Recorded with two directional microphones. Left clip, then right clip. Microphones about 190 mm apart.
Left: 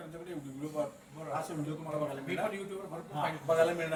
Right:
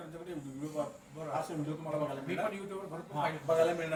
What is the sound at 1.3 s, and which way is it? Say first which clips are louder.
A man's voice: even; centre (ahead or behind).